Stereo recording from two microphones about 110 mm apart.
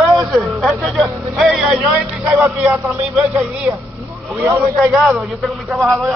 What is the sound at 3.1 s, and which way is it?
Speech, 5° right (ahead or behind).